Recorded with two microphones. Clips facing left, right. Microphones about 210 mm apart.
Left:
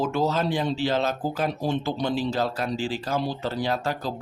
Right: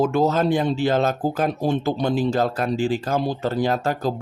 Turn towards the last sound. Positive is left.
turn(degrees=-50)  # may be behind; listen again after turning